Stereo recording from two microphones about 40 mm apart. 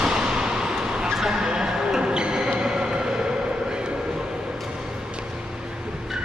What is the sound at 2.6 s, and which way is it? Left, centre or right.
Vehicle, centre.